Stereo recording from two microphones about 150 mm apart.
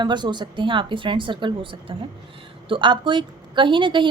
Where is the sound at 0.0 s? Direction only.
30° right (ahead or behind).